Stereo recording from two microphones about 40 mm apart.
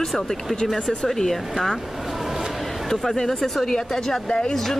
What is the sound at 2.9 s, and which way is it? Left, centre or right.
Speech, centre.